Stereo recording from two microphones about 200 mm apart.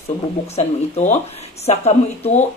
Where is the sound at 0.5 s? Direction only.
35° left (ahead or behind).